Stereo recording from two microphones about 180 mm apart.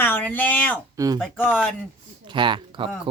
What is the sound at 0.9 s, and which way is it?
Speech, 20° right (ahead or behind).